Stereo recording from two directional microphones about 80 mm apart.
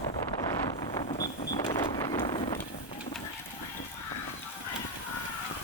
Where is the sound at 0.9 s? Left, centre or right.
Left.